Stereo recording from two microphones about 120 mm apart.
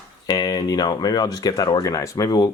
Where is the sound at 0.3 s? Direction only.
30° left (ahead or behind).